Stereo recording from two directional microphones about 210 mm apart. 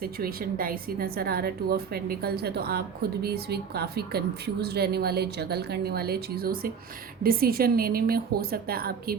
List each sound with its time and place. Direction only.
0.0 s a woman's voice: 45° right (ahead or behind)